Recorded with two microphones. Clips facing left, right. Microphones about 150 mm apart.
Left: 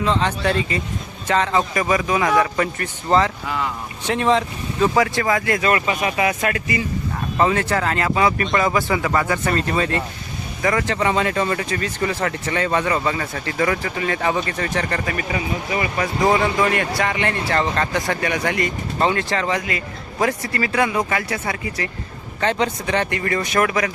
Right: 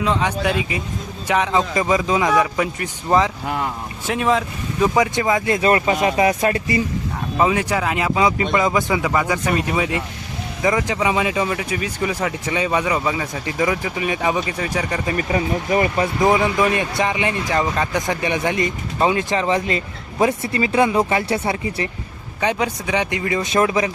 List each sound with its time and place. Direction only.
0.0 s speech: 10° right (ahead or behind)
3.4 s speech: 50° right (ahead or behind)
4.0 s speech: 5° right (ahead or behind)
4.9 s speech: 20° right (ahead or behind); by 6.8 s 35° right (ahead or behind)
7.3 s speech: 10° right (ahead or behind)
15.3 s speech: 40° right (ahead or behind)
16.0 s speech: 20° right (ahead or behind)
22.4 s speech: 10° right (ahead or behind)